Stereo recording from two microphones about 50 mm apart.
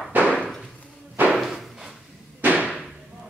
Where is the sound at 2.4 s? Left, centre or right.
Right.